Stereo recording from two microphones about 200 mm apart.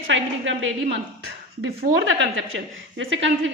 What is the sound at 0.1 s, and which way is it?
Speech, 70° right (ahead or behind).